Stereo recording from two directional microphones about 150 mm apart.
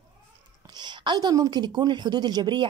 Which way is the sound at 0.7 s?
30° right (ahead or behind).